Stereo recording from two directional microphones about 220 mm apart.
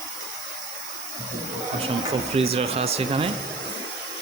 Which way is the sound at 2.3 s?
25° right (ahead or behind).